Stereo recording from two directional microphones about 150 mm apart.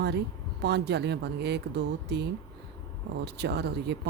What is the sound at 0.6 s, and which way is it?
Speech, 90° right.